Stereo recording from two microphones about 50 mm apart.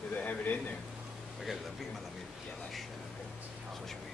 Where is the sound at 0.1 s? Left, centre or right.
Left.